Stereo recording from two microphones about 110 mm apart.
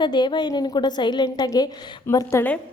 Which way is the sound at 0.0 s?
45° left (ahead or behind).